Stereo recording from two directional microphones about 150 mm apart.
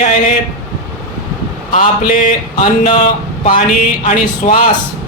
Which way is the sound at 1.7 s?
60° left (ahead or behind).